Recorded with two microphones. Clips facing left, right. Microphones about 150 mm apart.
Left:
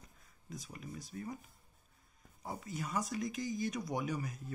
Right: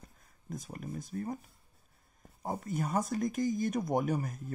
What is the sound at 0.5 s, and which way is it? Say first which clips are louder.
Speech: right 6 dB; 50° right (ahead or behind).